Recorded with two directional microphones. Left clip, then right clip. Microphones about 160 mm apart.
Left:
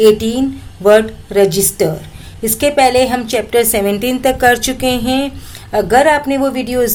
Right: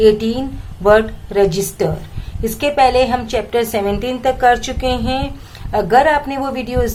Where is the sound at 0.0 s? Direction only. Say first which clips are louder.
Left 3 dB; 30° left (ahead or behind).